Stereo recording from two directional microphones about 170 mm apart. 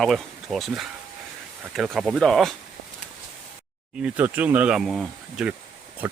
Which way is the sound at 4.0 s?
5° right (ahead or behind).